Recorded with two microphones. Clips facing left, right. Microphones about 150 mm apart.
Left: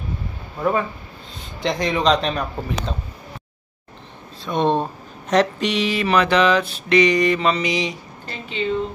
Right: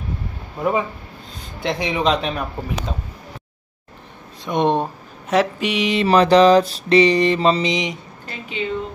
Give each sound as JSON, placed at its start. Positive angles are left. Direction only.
{"t": 0.6, "sound": "speech", "side_deg": -15}
{"t": 4.5, "sound": "speech", "side_deg": -15}
{"t": 5.9, "sound": "mantra", "side_deg": -35}
{"t": 8.3, "sound": "speech", "side_deg": -10}